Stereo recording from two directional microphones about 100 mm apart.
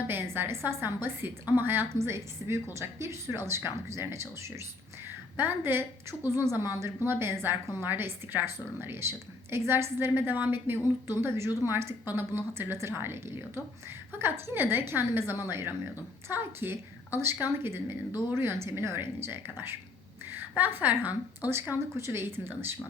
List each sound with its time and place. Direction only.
0.1 s a woman's voice: 20° right (ahead or behind)